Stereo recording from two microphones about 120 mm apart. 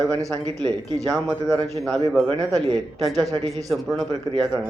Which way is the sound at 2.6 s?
35° right (ahead or behind).